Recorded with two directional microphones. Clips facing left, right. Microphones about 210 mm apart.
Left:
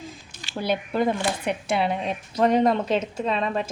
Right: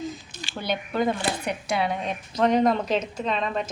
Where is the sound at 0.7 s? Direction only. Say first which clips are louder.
Left 1 dB; 5° left (ahead or behind).